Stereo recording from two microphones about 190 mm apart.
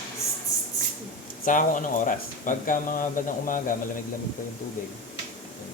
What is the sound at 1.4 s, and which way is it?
Speech, 45° left (ahead or behind).